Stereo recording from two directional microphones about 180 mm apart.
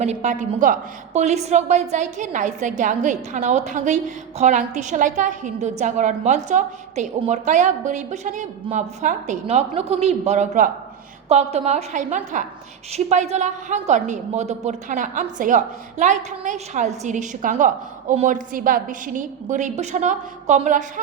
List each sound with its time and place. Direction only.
0.0 s a woman's voice: 40° right (ahead or behind)